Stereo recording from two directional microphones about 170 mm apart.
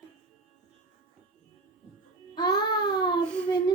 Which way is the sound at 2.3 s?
25° left (ahead or behind).